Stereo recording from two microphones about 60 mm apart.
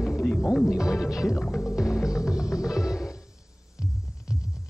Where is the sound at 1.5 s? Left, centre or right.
Centre.